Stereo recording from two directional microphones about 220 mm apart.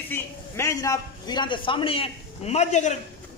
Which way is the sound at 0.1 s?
15° left (ahead or behind).